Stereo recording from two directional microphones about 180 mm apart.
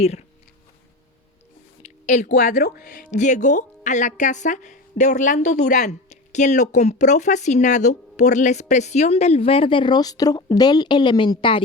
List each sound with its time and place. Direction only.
0.0 s speech: 35° left (ahead or behind)
1.8 s a sound: 40° left (ahead or behind)
2.2 s speech: 50° left (ahead or behind); by 11.6 s 30° left (ahead or behind)